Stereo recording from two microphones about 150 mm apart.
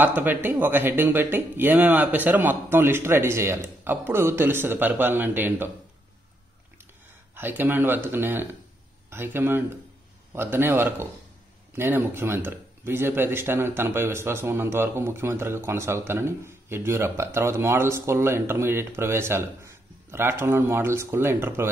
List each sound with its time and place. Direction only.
0.0 s speech: 10° right (ahead or behind)
7.3 s speech: 15° right (ahead or behind)